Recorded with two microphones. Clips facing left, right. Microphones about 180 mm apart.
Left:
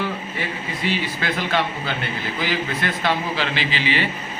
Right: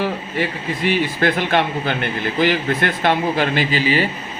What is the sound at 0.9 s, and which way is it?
A man's voice, 55° right (ahead or behind).